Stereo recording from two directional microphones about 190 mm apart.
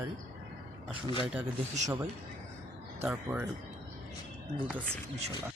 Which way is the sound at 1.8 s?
15° right (ahead or behind).